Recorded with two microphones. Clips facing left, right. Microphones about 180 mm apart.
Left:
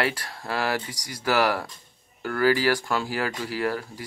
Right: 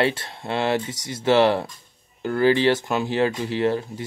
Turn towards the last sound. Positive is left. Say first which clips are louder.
# right 5 dB
turn(degrees=-25)  # may be behind; listen again after turning